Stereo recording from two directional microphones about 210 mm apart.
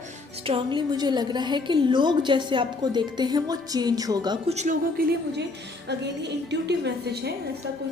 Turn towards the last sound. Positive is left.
turn(degrees=-50)  # may be behind; listen again after turning